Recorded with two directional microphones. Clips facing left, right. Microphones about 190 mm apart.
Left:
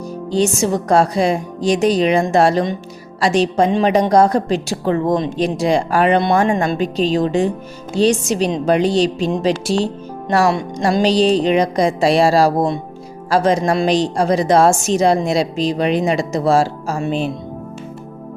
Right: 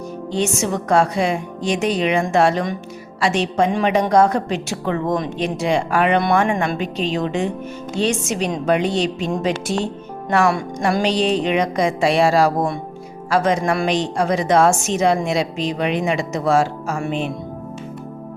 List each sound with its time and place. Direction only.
0.3 s a woman's voice: 35° left (ahead or behind)
10.4 s speech: 20° left (ahead or behind)
11.0 s a woman's voice: 35° left (ahead or behind)